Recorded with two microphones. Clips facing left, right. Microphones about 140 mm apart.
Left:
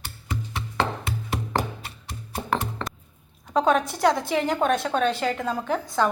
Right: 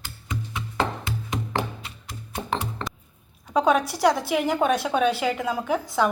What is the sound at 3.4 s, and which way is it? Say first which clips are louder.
A woman's voice: right 1 dB; 5° right (ahead or behind).